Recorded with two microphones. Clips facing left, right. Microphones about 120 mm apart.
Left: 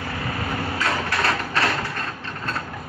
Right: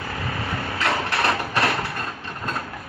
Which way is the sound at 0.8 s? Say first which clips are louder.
Right 2 dB; 15° right (ahead or behind).